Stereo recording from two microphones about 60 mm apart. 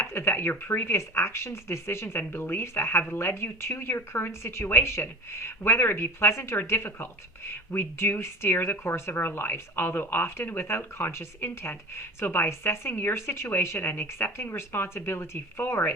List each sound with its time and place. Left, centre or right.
0.0 s speech: left
13.7 s speech: left